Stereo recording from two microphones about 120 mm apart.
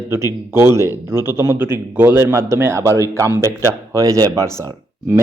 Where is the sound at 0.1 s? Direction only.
20° right (ahead or behind).